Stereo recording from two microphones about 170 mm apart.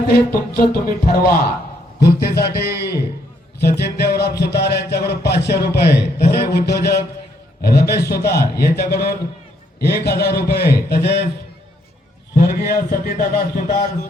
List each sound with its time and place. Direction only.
0.1 s a man's voice: 65° left (ahead or behind)
2.0 s a sound: 65° left (ahead or behind)
12.4 s a man's voice: 60° left (ahead or behind)